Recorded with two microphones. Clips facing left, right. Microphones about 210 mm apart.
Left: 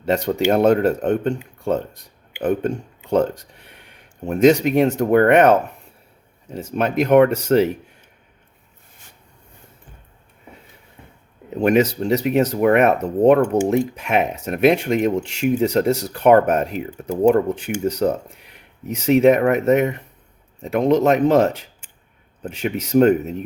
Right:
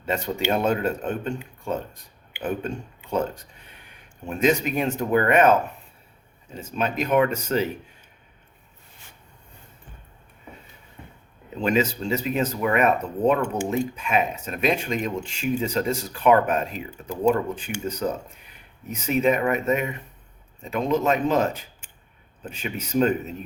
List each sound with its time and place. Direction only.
0.0 s speech: 70° left (ahead or behind)
11.5 s speech: 60° left (ahead or behind)